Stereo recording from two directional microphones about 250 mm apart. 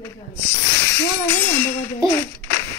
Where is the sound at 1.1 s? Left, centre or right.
Centre.